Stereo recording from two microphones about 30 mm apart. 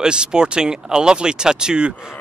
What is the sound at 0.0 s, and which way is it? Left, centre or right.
Speech, right.